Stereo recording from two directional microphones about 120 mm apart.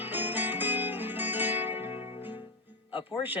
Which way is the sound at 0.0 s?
15° right (ahead or behind).